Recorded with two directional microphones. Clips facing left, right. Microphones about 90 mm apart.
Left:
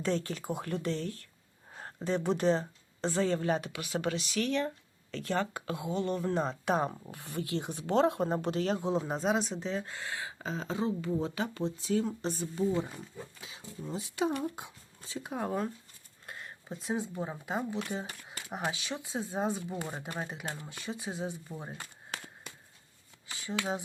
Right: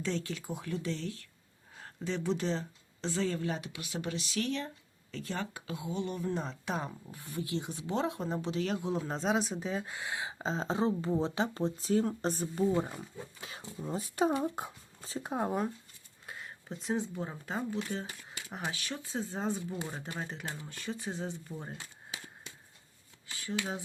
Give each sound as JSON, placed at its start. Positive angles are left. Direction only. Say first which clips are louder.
{"t": 0.0, "sound": "speech", "louder": "left 3 dB", "side_deg": 45}
{"t": 0.5, "sound": "speech", "louder": "left 3 dB", "side_deg": 55}
{"t": 4.0, "sound": "speech", "louder": "left 2 dB", "side_deg": 80}
{"t": 5.1, "sound": "speech", "louder": "left 5 dB", "side_deg": 70}
{"t": 8.6, "sound": "speech", "louder": "left 3 dB", "side_deg": 35}
{"t": 9.0, "sound": "speech", "louder": "left 1 dB", "side_deg": 5}
{"t": 13.4, "sound": "speech", "louder": "right 3 dB", "side_deg": -55}
{"t": 13.8, "sound": "speech", "louder": "right 2 dB", "side_deg": -40}
{"t": 15.3, "sound": "speech", "louder": "right 1 dB", "side_deg": -20}
{"t": 16.2, "sound": "speech", "louder": "even", "side_deg": 0}
{"t": 21.8, "sound": "a sound", "louder": "left 3 dB", "side_deg": 55}